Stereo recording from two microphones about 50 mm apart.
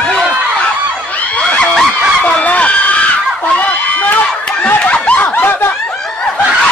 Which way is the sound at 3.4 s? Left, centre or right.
Left.